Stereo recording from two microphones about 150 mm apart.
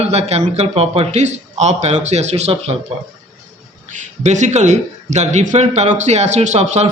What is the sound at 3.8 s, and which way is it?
A man's voice, 55° right (ahead or behind).